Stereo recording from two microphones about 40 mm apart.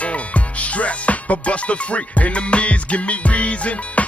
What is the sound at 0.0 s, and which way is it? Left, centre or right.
Music, left.